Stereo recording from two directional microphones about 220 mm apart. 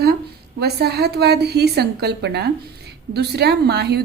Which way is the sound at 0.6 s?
45° right (ahead or behind).